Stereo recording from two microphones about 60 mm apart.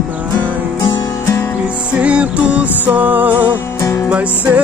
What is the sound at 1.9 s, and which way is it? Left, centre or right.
Music, right.